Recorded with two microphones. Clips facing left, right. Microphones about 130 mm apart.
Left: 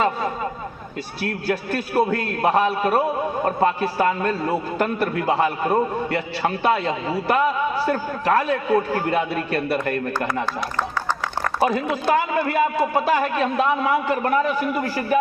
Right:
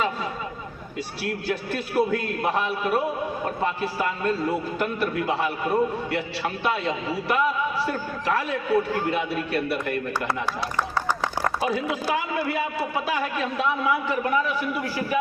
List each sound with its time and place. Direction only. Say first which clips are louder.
1.5 s a man's voice: left 6 dB; 50° left (ahead or behind)
11.6 s a man's voice: left 9 dB; 50° left (ahead or behind)